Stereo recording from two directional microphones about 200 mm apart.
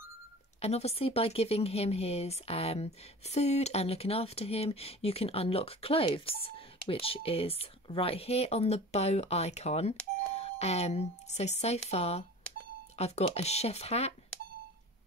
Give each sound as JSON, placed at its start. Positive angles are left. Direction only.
{"t": 0.6, "sound": "speech", "side_deg": 30}